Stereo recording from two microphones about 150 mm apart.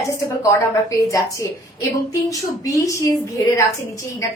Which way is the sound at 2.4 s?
20° left (ahead or behind).